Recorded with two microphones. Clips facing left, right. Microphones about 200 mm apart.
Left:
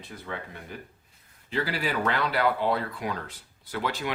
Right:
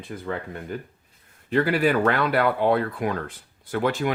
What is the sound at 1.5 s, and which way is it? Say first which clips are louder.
Speech: right 9 dB; 55° right (ahead or behind).